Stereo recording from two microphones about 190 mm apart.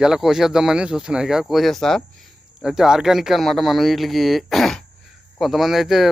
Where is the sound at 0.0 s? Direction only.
5° right (ahead or behind).